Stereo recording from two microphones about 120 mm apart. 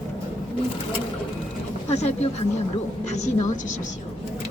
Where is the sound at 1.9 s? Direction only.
65° left (ahead or behind).